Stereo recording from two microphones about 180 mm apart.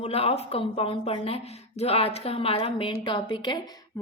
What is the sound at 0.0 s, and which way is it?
A woman's voice, 35° left (ahead or behind).